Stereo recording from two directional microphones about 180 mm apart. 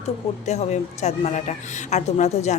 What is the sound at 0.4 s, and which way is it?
Speech, 40° left (ahead or behind).